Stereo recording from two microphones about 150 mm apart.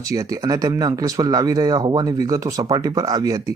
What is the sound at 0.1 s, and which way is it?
Speech, 20° right (ahead or behind).